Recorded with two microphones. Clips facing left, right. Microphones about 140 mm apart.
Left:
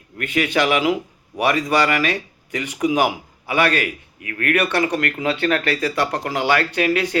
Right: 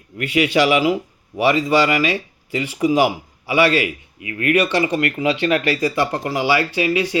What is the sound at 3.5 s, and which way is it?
A man's voice, 55° left (ahead or behind).